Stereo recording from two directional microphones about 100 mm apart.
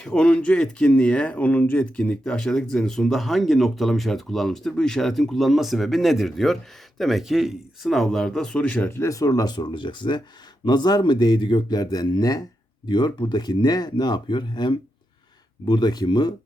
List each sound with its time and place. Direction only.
0.0 s speech: 10° left (ahead or behind)
9.0 s speech: 35° left (ahead or behind)